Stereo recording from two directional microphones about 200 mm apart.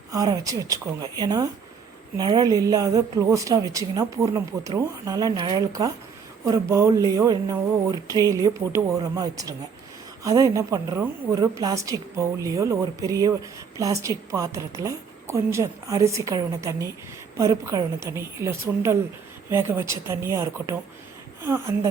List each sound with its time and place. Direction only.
0.1 s a woman's voice: 15° right (ahead or behind)